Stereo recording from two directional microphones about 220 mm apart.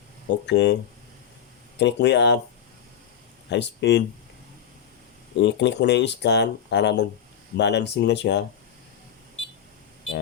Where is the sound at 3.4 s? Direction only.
50° left (ahead or behind).